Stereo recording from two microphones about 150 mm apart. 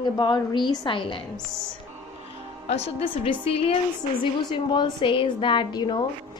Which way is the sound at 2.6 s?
45° left (ahead or behind).